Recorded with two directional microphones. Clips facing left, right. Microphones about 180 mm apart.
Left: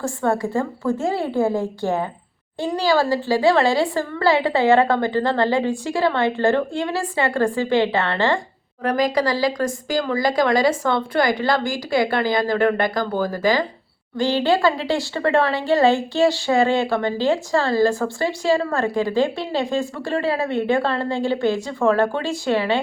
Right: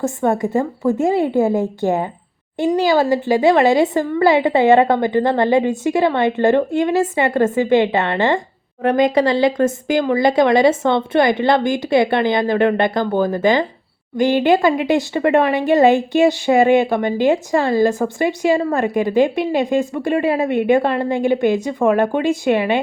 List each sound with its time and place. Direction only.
0.0 s speech: 20° right (ahead or behind)